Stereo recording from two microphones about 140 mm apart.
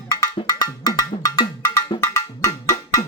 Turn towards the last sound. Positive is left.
turn(degrees=25)  # may be behind; listen again after turning